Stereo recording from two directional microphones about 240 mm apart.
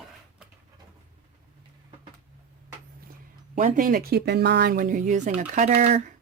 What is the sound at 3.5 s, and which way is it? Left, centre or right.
Speech, right.